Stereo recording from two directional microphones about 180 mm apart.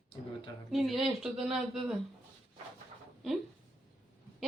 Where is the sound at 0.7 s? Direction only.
Centre (ahead or behind).